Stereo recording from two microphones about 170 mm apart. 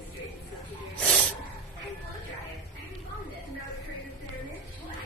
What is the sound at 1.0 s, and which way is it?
Snake, 5° left (ahead or behind).